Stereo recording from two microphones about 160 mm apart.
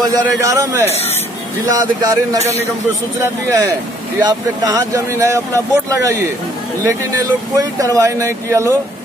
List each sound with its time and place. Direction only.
0.1 s speech: 20° right (ahead or behind)
4.2 s speech: 25° right (ahead or behind)